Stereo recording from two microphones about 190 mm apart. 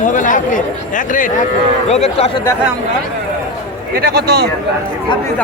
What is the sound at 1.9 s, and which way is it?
Speech, 35° left (ahead or behind).